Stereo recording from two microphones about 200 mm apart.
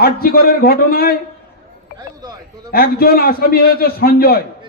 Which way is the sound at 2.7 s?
50° left (ahead or behind).